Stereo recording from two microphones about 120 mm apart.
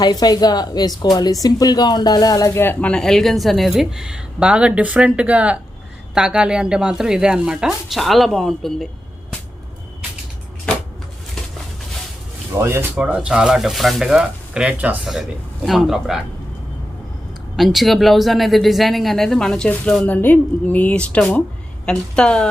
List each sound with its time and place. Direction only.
0.0 s speech: 35° left (ahead or behind)
2.9 s speech: 5° left (ahead or behind)
12.5 s speech: 20° right (ahead or behind)
13.0 s speech: 10° right (ahead or behind)
17.6 s a woman's voice: centre (ahead or behind)